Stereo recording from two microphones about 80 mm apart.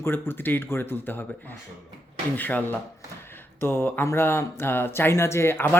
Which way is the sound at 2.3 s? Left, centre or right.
Left.